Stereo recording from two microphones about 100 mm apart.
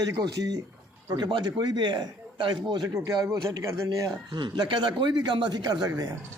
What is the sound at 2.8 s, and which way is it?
A man's voice, 35° right (ahead or behind).